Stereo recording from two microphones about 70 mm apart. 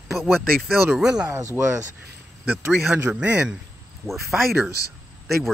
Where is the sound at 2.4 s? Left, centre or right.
Right.